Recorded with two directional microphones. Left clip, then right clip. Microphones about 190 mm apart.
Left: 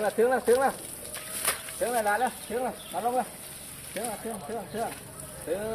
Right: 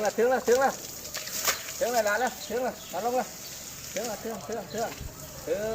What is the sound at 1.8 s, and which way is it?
Speech, 20° right (ahead or behind).